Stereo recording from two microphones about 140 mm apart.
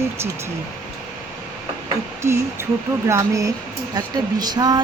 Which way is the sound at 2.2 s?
20° right (ahead or behind).